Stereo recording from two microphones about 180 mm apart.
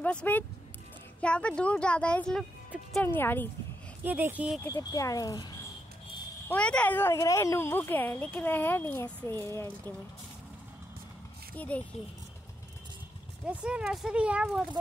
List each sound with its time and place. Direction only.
0.0 s speech: 5° left (ahead or behind)
4.0 s speech: 10° right (ahead or behind)
4.6 s speech: 15° left (ahead or behind)
6.5 s speech: 5° left (ahead or behind)
11.5 s speech: 10° left (ahead or behind)
13.5 s speech: 5° right (ahead or behind)